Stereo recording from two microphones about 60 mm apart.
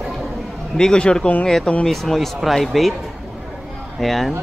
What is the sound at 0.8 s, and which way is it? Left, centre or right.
Speech, centre.